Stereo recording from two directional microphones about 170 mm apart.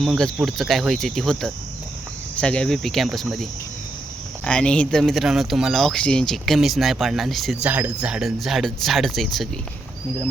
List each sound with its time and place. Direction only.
0.0 s speech: centre (ahead or behind)
4.4 s speech: 5° left (ahead or behind)